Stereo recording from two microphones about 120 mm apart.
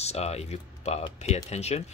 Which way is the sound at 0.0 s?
60° left (ahead or behind).